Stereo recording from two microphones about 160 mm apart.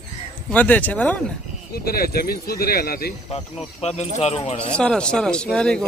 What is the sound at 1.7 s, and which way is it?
Speech, 70° left (ahead or behind).